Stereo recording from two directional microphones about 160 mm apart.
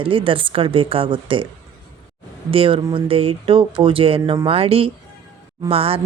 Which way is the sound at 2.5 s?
35° right (ahead or behind).